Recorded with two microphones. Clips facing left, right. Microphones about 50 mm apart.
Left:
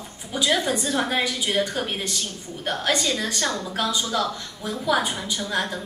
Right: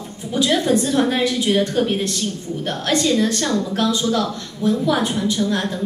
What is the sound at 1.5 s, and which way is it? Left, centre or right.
Speech, centre.